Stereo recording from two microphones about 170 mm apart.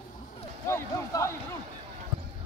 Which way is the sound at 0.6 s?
15° left (ahead or behind).